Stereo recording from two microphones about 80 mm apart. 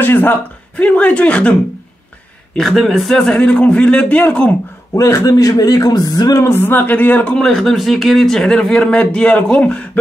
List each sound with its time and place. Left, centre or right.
0.0 s speech: left
2.5 s speech: centre
4.9 s a man's voice: left
6.4 s a man's voice: left
7.3 s speech: centre